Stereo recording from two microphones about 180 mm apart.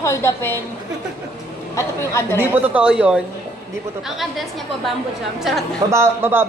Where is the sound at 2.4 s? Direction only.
10° right (ahead or behind).